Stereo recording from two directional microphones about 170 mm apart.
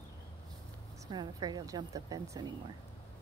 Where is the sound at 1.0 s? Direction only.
20° right (ahead or behind).